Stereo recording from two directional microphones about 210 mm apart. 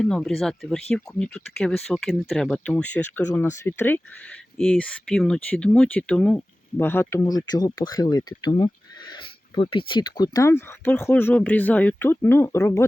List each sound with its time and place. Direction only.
0.0 s speech: 5° left (ahead or behind)